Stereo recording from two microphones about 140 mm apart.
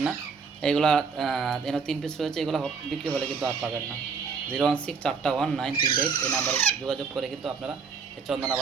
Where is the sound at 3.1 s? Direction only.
15° right (ahead or behind).